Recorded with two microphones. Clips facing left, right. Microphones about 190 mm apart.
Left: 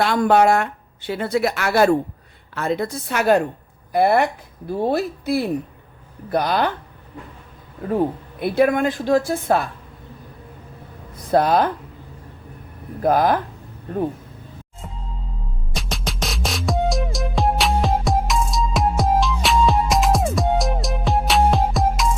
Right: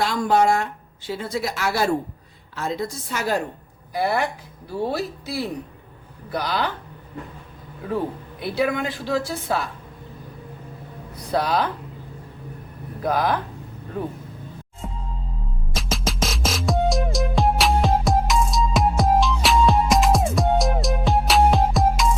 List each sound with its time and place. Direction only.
0.0 s speech: 60° left (ahead or behind)
8.4 s a woman's voice: 50° left (ahead or behind)
11.3 s a woman's voice: 50° left (ahead or behind)
13.0 s a woman's voice: 50° left (ahead or behind)
15.7 s music: centre (ahead or behind)